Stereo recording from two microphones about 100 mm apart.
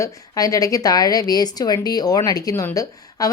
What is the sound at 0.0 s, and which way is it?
A woman's voice, 35° left (ahead or behind).